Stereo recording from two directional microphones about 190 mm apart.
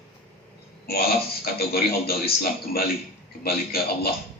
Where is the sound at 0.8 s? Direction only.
55° left (ahead or behind).